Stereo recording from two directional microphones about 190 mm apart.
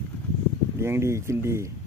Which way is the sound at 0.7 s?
15° right (ahead or behind).